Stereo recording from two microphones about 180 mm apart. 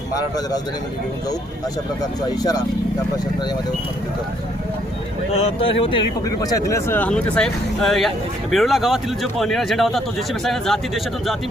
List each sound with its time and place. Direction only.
2.0 s speech: 20° left (ahead or behind)
5.4 s speech: 30° left (ahead or behind); by 11.3 s centre (ahead or behind)